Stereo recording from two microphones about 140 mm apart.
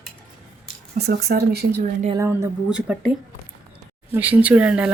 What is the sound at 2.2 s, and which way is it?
Speech, 20° right (ahead or behind).